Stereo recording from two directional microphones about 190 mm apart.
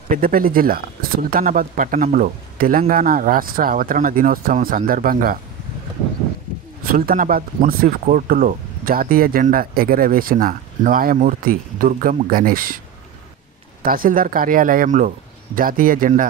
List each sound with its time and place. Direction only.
0.1 s speech: 50° right (ahead or behind)
6.8 s speech: 50° right (ahead or behind)
13.8 s speech: 50° right (ahead or behind)